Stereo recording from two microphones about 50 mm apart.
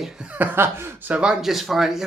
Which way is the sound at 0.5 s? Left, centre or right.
Right.